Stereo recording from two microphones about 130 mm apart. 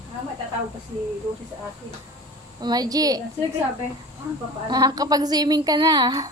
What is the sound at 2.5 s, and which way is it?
Speech, 30° right (ahead or behind).